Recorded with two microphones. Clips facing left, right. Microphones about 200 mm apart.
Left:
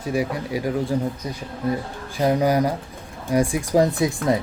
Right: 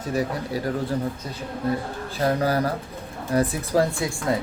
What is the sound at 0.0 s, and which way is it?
Speech, 10° left (ahead or behind).